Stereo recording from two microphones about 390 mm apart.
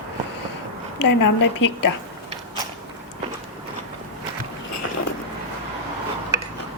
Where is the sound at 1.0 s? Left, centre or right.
Left.